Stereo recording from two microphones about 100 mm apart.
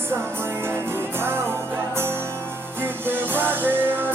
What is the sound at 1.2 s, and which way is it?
Music, 25° right (ahead or behind).